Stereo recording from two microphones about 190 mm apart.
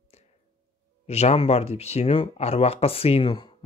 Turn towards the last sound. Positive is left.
turn(degrees=25)  # may be behind; listen again after turning